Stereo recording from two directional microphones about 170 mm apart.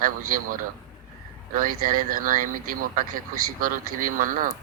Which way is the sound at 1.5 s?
55° right (ahead or behind).